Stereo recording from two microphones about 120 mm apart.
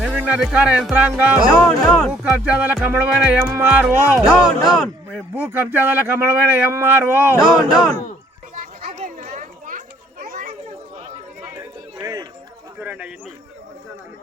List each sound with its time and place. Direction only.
0.0 s speech: 5° right (ahead or behind)
1.5 s speech: 10° left (ahead or behind)
2.2 s speech: 10° right (ahead or behind)
4.4 s speech: centre (ahead or behind)
5.3 s speech: 15° right (ahead or behind)
7.3 s speech: 5° right (ahead or behind)
8.5 s children playing: 85° right
11.5 s a sound: 30° right (ahead or behind)
12.8 s a sound: 10° right (ahead or behind)